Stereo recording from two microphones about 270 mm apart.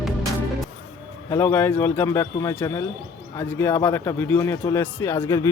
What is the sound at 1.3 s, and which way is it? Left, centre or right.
A man's voice, centre.